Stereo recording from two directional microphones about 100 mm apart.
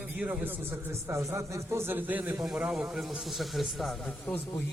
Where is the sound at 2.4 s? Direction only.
10° right (ahead or behind).